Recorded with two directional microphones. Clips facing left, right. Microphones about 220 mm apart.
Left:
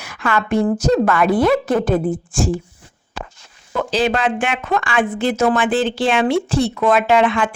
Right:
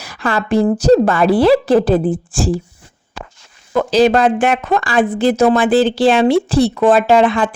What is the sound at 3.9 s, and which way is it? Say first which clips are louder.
Speech: right 7 dB; 40° right (ahead or behind).